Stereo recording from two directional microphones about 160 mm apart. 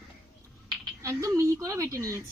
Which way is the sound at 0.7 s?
20° right (ahead or behind).